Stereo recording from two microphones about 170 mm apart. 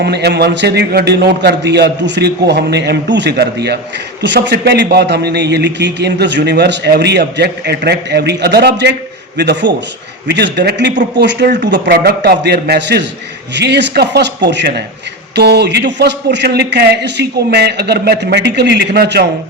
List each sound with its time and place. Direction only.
0.0 s a man's voice: 75° right (ahead or behind)
4.2 s a man's voice: 90° right; by 13.0 s 75° right (ahead or behind)
13.5 s speech: 90° right
15.4 s speech: 75° right (ahead or behind)